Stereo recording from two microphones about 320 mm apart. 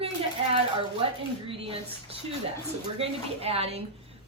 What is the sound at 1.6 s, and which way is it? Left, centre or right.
A woman's voice, centre.